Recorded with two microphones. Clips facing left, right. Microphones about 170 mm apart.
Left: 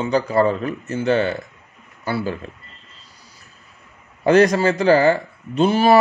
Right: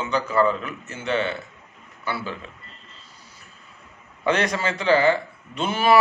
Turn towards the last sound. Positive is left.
turn(degrees=35)  # may be behind; listen again after turning